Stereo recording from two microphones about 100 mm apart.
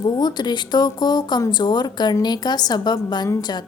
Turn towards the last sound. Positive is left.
turn(degrees=45)  # may be behind; listen again after turning